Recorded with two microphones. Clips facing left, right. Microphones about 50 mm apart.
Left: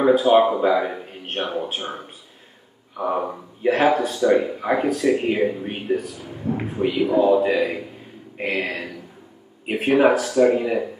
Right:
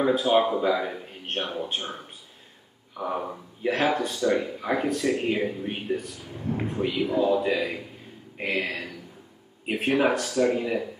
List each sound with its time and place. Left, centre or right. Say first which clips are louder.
0.1 s speech: left 6 dB; centre
3.0 s speech: left 6 dB; centre
3.6 s speech: left 6 dB; centre